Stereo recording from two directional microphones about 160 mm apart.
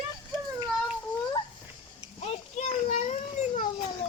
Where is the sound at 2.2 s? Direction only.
40° left (ahead or behind).